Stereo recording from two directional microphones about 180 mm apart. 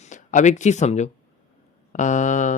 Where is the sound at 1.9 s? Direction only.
45° left (ahead or behind).